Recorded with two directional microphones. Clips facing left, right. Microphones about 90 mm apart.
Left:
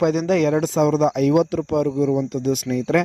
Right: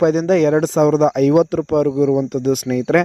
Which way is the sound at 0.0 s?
35° right (ahead or behind).